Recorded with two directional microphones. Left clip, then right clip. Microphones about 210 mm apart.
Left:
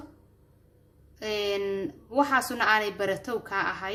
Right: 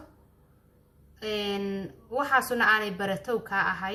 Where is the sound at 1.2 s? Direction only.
35° left (ahead or behind).